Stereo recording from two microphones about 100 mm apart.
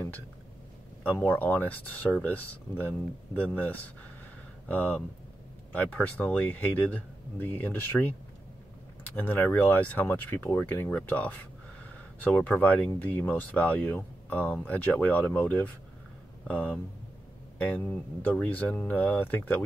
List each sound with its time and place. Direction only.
1.0 s speech: 15° left (ahead or behind)